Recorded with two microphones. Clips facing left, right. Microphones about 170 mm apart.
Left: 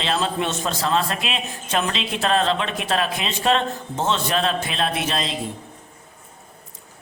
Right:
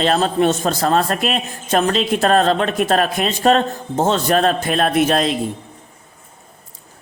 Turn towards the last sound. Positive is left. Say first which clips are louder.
# right 9 dB
turn(degrees=-55)  # may be behind; listen again after turning